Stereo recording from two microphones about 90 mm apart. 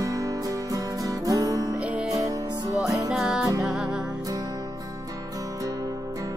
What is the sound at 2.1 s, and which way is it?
Music, 40° right (ahead or behind).